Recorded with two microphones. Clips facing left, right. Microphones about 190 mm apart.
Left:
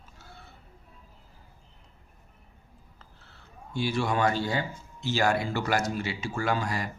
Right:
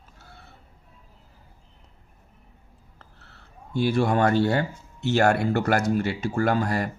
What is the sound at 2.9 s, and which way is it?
Speech, 65° right (ahead or behind).